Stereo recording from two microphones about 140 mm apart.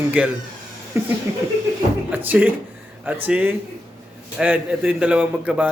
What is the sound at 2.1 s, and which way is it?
Speech, 15° right (ahead or behind).